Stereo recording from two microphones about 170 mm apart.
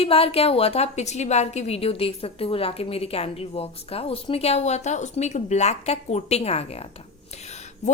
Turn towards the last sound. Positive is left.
turn(degrees=45)  # may be behind; listen again after turning